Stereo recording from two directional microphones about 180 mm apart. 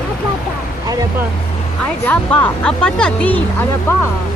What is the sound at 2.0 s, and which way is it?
Speech, 10° left (ahead or behind).